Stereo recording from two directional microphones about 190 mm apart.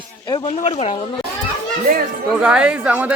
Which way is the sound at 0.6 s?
30° left (ahead or behind).